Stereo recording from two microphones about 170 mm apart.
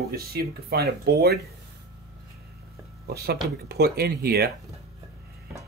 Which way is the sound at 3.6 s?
70° right (ahead or behind).